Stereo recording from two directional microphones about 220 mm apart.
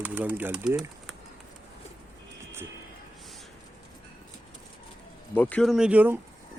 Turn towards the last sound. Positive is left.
turn(degrees=-10)  # may be behind; listen again after turning